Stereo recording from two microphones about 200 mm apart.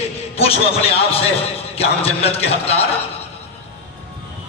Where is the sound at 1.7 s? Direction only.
30° left (ahead or behind).